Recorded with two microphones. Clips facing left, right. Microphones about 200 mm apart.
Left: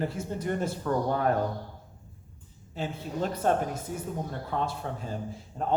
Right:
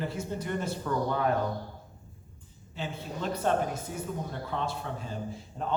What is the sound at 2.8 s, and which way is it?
A man's voice, 45° left (ahead or behind).